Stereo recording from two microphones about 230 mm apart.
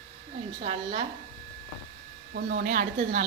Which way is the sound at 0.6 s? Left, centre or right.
Right.